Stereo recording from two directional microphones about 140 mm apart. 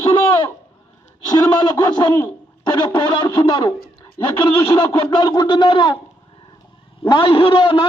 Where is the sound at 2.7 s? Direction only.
35° left (ahead or behind).